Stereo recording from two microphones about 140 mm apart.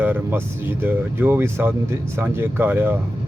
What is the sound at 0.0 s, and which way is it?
Speech, 15° right (ahead or behind).